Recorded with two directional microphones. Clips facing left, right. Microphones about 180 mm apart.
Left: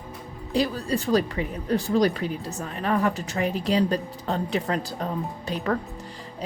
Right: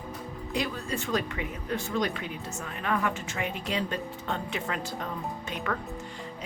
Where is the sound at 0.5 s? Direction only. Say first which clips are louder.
Left 7 dB; 35° left (ahead or behind).